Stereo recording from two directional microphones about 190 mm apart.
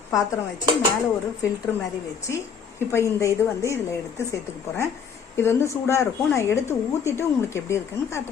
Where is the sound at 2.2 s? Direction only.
15° left (ahead or behind).